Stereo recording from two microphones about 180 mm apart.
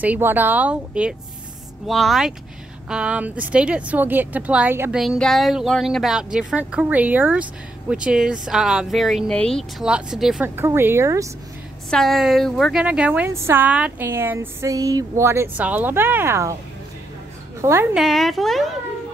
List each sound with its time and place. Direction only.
0.0 s a woman's voice: 10° right (ahead or behind)
5.0 s speech: centre (ahead or behind); by 11.2 s 15° right (ahead or behind)
11.9 s a woman's voice: centre (ahead or behind); by 16.5 s 15° right (ahead or behind)
17.6 s a woman's voice: 15° right (ahead or behind)
17.9 s speech: centre (ahead or behind)